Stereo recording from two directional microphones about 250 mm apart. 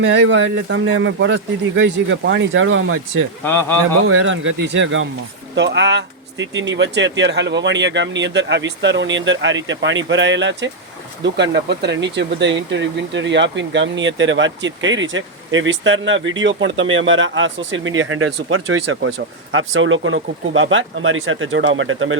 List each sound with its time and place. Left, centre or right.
0.0 s speech: right
3.4 s a man's voice: centre
4.0 s speech: right